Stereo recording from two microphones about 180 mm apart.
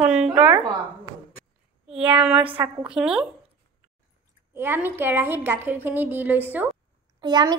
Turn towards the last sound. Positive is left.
turn(degrees=-25)  # may be behind; listen again after turning